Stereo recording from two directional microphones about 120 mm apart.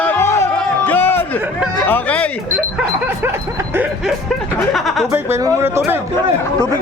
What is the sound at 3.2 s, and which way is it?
Speech, 20° right (ahead or behind).